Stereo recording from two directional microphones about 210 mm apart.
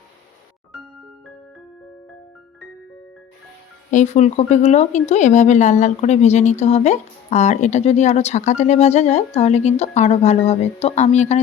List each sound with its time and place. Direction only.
3.9 s speech: 35° left (ahead or behind)